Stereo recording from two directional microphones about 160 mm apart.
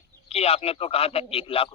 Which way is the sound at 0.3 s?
40° left (ahead or behind).